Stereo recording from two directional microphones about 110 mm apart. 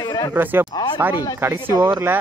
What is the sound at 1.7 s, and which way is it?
Speech, 35° right (ahead or behind).